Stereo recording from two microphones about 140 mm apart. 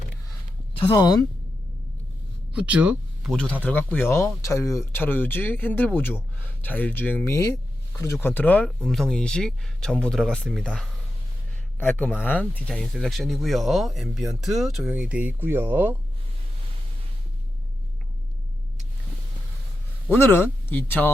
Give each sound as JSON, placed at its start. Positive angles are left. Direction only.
{"t": 0.9, "sound": "speech", "side_deg": 30}
{"t": 2.5, "sound": "speech", "side_deg": -10}
{"t": 3.3, "sound": "speech", "side_deg": 10}
{"t": 20.1, "sound": "speech", "side_deg": 15}